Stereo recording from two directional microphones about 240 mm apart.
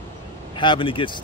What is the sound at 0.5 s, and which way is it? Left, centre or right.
Speech, centre.